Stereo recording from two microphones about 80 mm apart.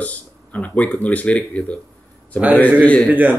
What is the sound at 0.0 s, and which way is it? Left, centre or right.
Speech, centre.